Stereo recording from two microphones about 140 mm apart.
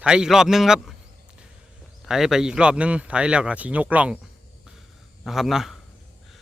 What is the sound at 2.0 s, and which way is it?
A man's voice, 5° right (ahead or behind).